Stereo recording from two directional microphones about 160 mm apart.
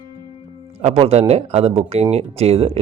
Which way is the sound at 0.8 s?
40° right (ahead or behind).